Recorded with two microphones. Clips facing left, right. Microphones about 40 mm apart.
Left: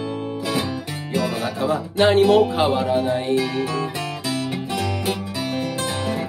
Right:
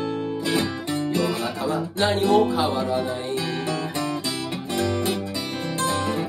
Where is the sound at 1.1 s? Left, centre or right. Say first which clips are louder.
Left 6 dB; left.